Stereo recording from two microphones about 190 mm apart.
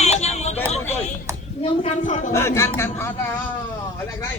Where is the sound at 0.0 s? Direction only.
35° left (ahead or behind).